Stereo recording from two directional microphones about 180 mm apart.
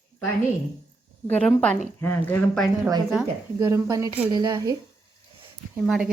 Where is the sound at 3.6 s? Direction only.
15° right (ahead or behind).